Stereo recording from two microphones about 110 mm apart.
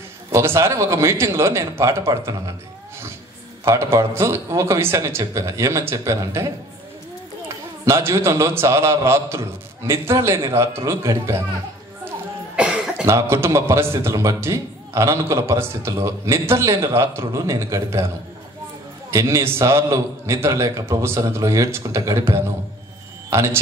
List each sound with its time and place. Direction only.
0.3 s a man's voice: 25° right (ahead or behind)
3.6 s a man's voice: 30° right (ahead or behind)
7.8 s a man's voice: 25° right (ahead or behind)
12.5 s cough: 5° right (ahead or behind)
13.0 s a man's voice: 25° right (ahead or behind)
19.1 s a man's voice: 25° right (ahead or behind)